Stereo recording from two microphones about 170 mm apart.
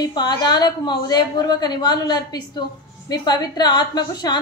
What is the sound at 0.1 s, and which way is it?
A woman's voice, 25° left (ahead or behind).